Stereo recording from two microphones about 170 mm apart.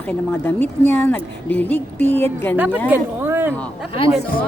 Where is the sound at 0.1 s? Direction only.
10° left (ahead or behind).